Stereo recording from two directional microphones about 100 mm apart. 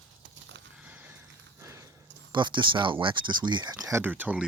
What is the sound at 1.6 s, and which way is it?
Horse, 30° right (ahead or behind).